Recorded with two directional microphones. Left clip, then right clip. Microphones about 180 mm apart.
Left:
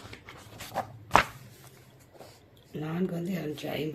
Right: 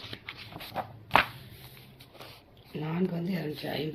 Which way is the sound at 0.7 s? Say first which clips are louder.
Left 1 dB; 35° left (ahead or behind).